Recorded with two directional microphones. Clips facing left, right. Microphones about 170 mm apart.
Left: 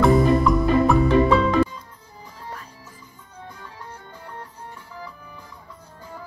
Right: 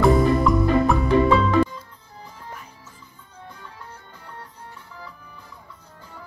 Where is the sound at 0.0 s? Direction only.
Centre (ahead or behind).